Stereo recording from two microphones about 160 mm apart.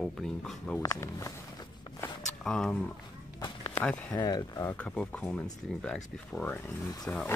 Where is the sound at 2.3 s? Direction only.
5° left (ahead or behind).